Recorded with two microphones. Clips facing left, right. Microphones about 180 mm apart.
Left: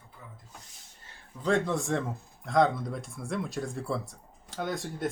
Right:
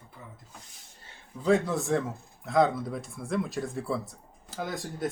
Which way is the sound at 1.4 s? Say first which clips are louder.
Right 2 dB; 5° right (ahead or behind).